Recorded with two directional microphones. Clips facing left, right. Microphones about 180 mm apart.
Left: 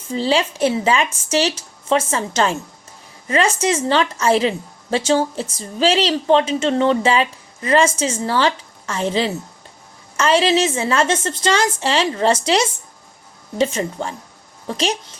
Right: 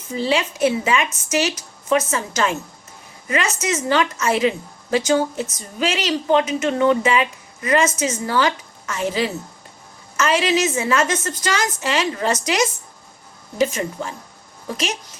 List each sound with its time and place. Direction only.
0.1 s a woman's voice: 30° left (ahead or behind)